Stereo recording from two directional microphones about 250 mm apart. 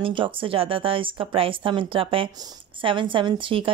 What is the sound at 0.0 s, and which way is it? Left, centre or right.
A woman's voice, right.